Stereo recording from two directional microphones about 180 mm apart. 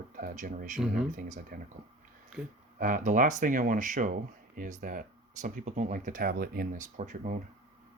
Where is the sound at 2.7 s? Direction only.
45° right (ahead or behind).